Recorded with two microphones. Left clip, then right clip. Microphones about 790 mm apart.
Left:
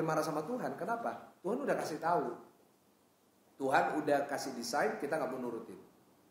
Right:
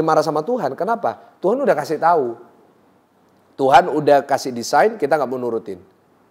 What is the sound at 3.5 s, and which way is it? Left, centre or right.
A man's voice, right.